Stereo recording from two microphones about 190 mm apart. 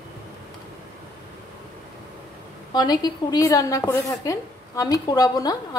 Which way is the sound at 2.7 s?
20° left (ahead or behind).